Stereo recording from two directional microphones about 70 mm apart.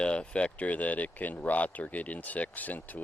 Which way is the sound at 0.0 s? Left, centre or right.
Centre.